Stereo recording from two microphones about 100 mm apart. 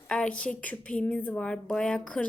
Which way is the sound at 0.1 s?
10° left (ahead or behind).